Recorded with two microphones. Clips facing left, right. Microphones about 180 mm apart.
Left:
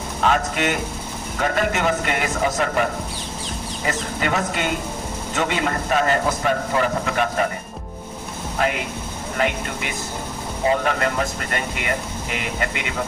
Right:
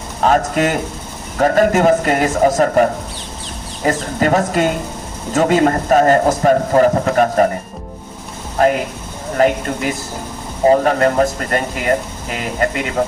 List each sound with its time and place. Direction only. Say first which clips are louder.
0.2 s speech: right 6 dB; 40° right (ahead or behind)
8.6 s speech: right 9 dB; 45° right (ahead or behind)